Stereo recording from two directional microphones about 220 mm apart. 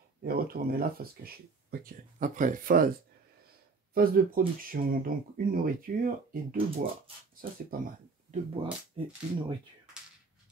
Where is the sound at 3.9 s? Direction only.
40° right (ahead or behind).